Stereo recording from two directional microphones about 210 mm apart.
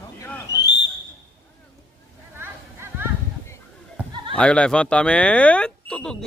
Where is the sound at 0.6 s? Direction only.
55° left (ahead or behind).